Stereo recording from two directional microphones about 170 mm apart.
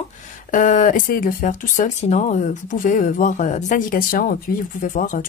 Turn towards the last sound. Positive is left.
turn(degrees=50)  # may be behind; listen again after turning